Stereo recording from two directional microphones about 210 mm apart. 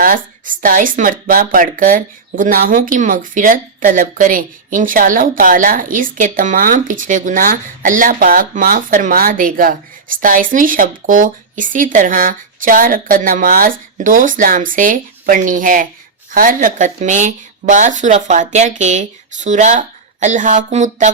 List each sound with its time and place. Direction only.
0.0 s speech: 40° right (ahead or behind)